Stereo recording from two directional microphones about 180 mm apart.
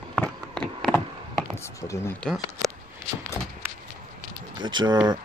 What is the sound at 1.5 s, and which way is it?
Speech, 15° left (ahead or behind).